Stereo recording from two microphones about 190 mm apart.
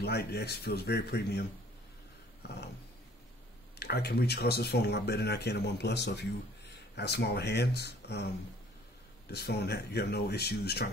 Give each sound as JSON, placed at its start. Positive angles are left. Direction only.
{"t": 0.0, "sound": "speech", "side_deg": 60}
{"t": 2.4, "sound": "a sound", "side_deg": 60}
{"t": 3.8, "sound": "speech", "side_deg": 55}
{"t": 9.3, "sound": "speech", "side_deg": 60}